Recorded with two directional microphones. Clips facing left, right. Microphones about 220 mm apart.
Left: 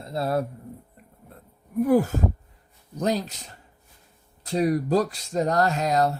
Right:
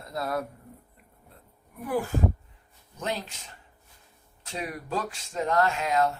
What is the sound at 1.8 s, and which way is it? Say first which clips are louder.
Speech: left 7 dB; 40° left (ahead or behind).